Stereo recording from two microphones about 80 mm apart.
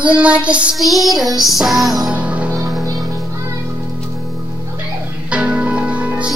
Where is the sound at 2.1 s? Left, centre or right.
Centre.